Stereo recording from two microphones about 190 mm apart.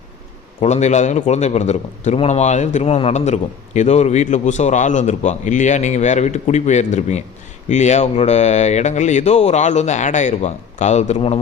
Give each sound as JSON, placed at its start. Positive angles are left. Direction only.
{"t": 0.6, "sound": "a man's voice", "side_deg": 35}